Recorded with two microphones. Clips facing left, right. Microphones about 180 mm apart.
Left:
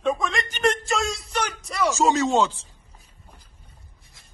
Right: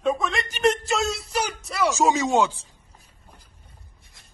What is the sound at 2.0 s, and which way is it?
Speech, 15° right (ahead or behind).